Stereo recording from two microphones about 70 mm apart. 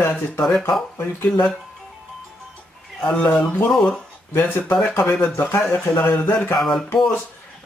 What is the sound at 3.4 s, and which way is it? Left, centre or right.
Speech, left.